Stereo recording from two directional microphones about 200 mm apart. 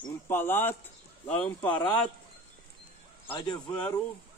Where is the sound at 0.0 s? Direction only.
10° left (ahead or behind).